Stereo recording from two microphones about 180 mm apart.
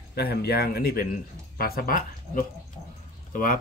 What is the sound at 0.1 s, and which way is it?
Speech, 60° left (ahead or behind).